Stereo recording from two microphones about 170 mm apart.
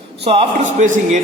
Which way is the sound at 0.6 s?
50° right (ahead or behind).